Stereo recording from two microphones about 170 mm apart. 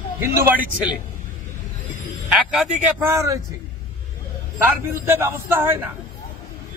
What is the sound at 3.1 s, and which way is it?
Speech, 15° right (ahead or behind).